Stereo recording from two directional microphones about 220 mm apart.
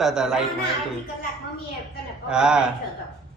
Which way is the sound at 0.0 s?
Centre (ahead or behind).